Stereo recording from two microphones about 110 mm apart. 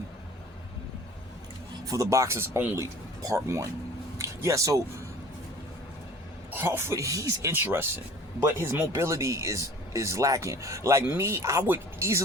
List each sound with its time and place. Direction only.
1.8 s speech: 30° right (ahead or behind)
6.5 s speech: 20° right (ahead or behind)